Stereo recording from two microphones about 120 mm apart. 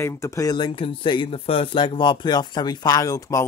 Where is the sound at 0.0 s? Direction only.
25° left (ahead or behind).